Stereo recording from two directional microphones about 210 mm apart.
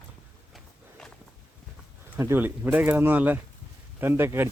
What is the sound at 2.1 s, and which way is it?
Speech, 10° right (ahead or behind).